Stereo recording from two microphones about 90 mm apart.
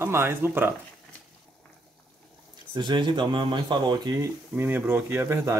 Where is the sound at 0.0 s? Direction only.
30° right (ahead or behind).